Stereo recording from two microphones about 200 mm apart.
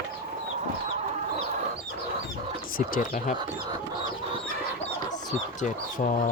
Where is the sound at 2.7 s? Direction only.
40° left (ahead or behind).